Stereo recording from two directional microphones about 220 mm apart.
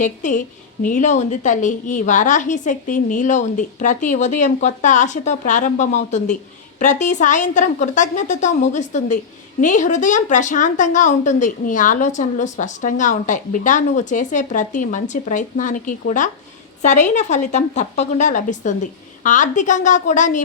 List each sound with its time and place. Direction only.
0.0 s a woman's voice: 35° left (ahead or behind)